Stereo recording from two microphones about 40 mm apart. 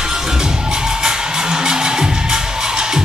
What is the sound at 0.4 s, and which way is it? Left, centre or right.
Music, centre.